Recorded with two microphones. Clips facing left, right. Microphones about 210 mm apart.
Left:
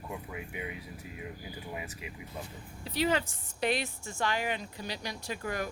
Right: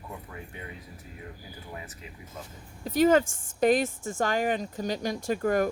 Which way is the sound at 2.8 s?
45° right (ahead or behind).